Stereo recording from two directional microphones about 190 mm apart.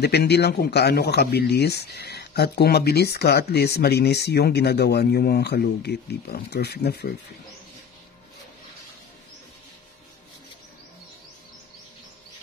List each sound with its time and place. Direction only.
0.0 s speech: 60° left (ahead or behind)